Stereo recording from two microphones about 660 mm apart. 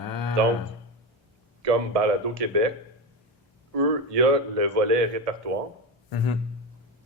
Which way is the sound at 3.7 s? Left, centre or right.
Right.